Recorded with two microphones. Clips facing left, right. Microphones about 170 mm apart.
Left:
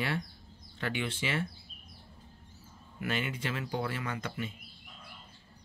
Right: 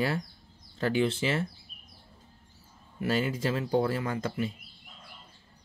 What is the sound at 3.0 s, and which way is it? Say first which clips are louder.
Speech: right 6 dB; 35° right (ahead or behind).